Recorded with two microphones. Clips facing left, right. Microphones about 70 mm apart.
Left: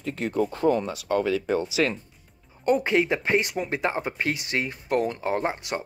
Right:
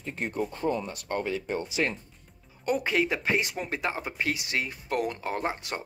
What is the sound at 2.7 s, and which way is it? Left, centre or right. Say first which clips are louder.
Speech: left 5 dB; left.